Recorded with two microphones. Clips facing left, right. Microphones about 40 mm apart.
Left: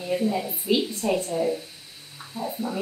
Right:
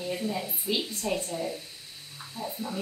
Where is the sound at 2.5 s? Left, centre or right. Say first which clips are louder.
Left 6 dB; left.